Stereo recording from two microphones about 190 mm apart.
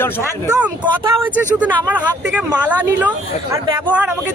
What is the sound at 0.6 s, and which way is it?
Speech, 10° right (ahead or behind).